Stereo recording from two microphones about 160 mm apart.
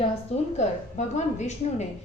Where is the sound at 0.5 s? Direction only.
45° left (ahead or behind).